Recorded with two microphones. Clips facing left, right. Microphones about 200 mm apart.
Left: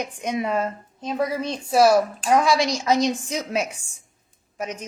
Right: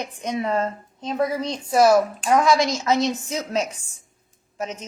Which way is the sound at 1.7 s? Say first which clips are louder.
Even; 25° left (ahead or behind).